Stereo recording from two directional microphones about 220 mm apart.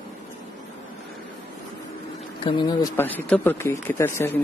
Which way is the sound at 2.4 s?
20° left (ahead or behind).